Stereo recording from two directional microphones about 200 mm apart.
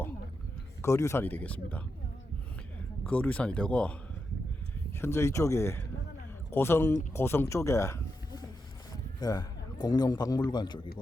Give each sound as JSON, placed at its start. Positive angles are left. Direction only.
{"t": 0.8, "sound": "speech", "side_deg": 15}
{"t": 3.0, "sound": "speech", "side_deg": 5}
{"t": 4.9, "sound": "a man's voice", "side_deg": 10}